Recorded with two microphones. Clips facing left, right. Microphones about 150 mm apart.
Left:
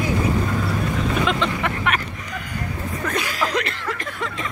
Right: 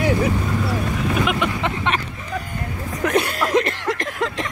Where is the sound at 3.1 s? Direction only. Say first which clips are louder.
Right 6 dB; 60° right (ahead or behind).